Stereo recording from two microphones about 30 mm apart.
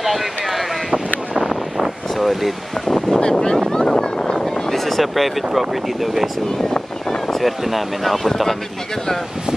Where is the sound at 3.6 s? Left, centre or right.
Left; by 5.6 s centre.